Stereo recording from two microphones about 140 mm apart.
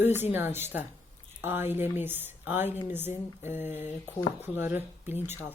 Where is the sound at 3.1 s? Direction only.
55° left (ahead or behind).